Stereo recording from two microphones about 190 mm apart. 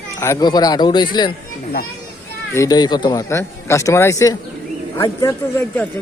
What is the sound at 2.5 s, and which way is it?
Speech, 15° left (ahead or behind).